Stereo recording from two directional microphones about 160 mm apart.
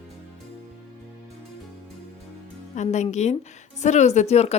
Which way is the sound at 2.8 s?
45° left (ahead or behind).